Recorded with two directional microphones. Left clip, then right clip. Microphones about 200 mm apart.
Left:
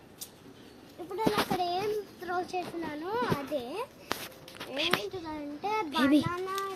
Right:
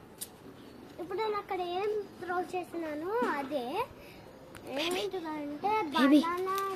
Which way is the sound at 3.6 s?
10° right (ahead or behind).